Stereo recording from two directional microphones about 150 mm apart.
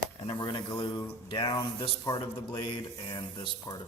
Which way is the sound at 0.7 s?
30° left (ahead or behind).